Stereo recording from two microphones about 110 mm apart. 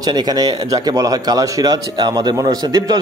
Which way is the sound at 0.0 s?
40° right (ahead or behind).